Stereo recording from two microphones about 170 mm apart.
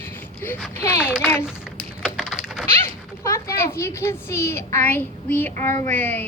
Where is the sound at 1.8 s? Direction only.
Centre (ahead or behind).